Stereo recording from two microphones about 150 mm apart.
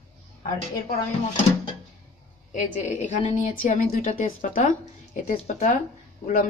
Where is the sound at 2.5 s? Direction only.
55° left (ahead or behind).